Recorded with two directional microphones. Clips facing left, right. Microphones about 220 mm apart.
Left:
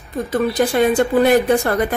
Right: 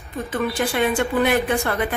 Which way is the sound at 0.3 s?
40° left (ahead or behind).